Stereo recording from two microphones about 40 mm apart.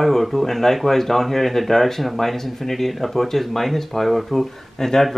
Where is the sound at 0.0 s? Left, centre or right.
Centre.